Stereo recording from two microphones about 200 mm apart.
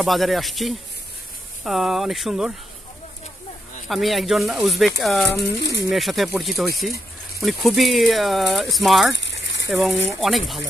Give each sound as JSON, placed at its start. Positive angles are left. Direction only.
{"t": 0.0, "sound": "speech", "side_deg": 0}
{"t": 3.9, "sound": "speech", "side_deg": 0}
{"t": 5.6, "sound": "speech", "side_deg": 55}
{"t": 5.9, "sound": "speech", "side_deg": 0}
{"t": 9.1, "sound": "bird", "side_deg": 60}
{"t": 9.7, "sound": "speech", "side_deg": 0}